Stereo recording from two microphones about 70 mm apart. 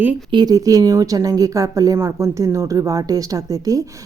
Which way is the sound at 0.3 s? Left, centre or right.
Right.